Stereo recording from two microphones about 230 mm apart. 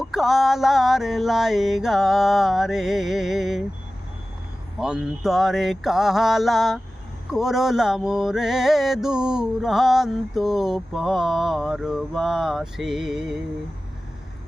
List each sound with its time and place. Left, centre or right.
0.0 s mantra: centre
4.8 s mantra: centre